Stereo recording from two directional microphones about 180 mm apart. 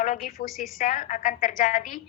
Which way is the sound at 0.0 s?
50° left (ahead or behind).